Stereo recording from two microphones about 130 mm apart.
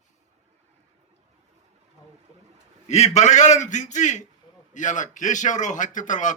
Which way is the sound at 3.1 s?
65° left (ahead or behind).